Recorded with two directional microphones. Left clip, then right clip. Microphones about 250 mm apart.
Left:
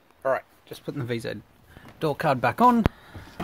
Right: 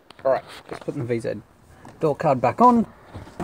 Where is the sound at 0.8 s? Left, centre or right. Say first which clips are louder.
Right 5 dB; left.